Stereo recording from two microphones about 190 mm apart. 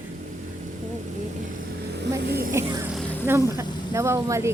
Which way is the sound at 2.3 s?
50° right (ahead or behind).